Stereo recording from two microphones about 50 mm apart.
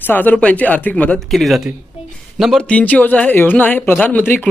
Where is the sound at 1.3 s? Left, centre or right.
Centre.